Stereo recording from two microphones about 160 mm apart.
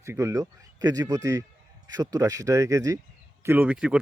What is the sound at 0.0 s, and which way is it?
A man's voice, 20° right (ahead or behind).